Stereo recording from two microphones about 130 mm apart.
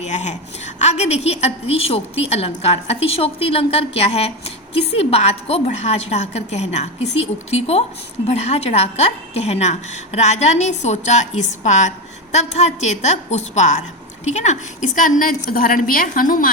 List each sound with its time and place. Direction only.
0.0 s a woman's voice: 65° left (ahead or behind); by 16.5 s 90° left